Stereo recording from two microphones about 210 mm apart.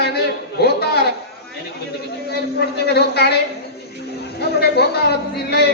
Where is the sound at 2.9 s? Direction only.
50° left (ahead or behind).